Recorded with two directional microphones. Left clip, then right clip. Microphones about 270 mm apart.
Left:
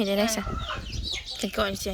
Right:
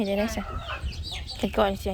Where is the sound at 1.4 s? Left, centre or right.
Centre.